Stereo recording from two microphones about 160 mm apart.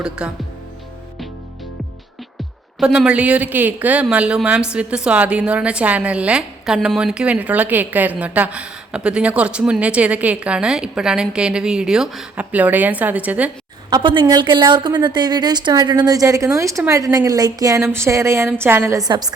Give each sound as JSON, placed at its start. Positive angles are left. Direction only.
{"t": 0.2, "sound": "speech", "side_deg": -5}
{"t": 2.8, "sound": "a woman's voice", "side_deg": -5}
{"t": 13.9, "sound": "a woman's voice", "side_deg": -30}